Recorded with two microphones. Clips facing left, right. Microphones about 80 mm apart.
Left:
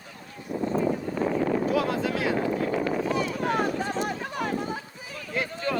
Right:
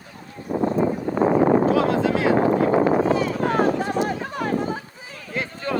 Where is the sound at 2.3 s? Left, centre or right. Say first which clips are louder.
Right 8 dB; right.